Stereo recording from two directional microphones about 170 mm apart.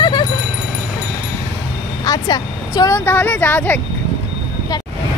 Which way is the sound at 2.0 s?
20° left (ahead or behind).